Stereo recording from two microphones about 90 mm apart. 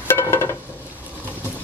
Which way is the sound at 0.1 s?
30° left (ahead or behind).